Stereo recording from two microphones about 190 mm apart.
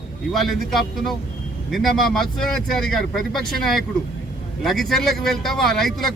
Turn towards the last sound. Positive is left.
turn(degrees=0)  # may be behind; listen again after turning